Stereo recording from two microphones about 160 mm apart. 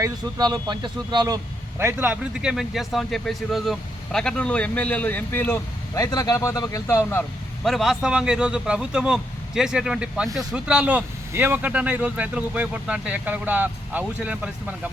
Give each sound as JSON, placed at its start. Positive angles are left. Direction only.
{"t": 0.0, "sound": "speech", "side_deg": -25}
{"t": 1.8, "sound": "a man's voice", "side_deg": -15}
{"t": 7.6, "sound": "a man's voice", "side_deg": 0}